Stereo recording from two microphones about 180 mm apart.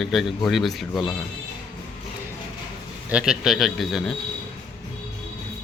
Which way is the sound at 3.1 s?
5° right (ahead or behind).